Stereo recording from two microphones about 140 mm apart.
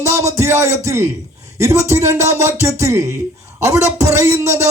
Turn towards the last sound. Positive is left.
turn(degrees=-20)  # may be behind; listen again after turning